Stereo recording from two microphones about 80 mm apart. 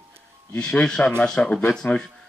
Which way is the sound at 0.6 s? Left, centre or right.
Centre.